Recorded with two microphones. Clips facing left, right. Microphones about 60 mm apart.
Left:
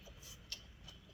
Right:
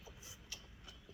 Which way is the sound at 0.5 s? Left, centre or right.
Centre.